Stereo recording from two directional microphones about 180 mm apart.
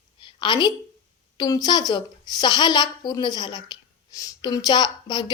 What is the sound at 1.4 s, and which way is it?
A woman's voice, 20° left (ahead or behind).